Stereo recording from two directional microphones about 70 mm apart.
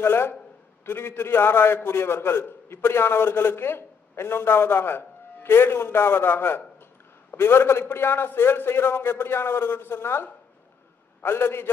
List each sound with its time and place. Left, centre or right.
0.0 s a man's voice: left